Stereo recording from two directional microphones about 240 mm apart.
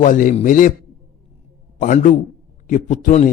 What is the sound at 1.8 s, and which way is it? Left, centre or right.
A man's voice, left.